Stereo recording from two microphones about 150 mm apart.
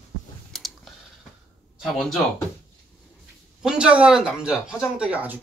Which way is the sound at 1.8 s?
Centre (ahead or behind).